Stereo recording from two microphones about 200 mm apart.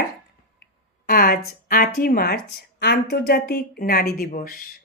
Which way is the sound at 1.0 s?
45° left (ahead or behind).